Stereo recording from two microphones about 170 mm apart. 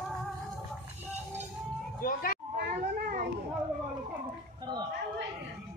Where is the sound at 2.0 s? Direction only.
55° left (ahead or behind).